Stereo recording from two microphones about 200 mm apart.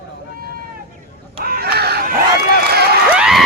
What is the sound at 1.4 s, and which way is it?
Chicken, 50° right (ahead or behind).